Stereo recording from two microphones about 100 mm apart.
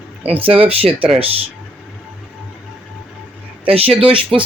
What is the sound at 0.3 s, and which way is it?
Speech, 65° right (ahead or behind).